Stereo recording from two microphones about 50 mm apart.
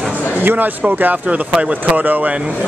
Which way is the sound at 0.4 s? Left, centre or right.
Right.